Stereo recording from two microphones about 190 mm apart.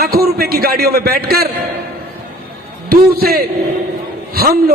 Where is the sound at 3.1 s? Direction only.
55° right (ahead or behind).